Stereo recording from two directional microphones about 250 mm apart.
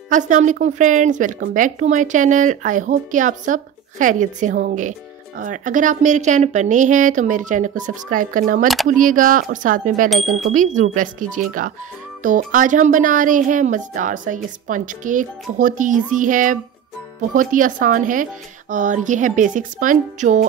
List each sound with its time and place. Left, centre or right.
0.1 s speech: right
10.0 s chime: centre
10.4 s speech: right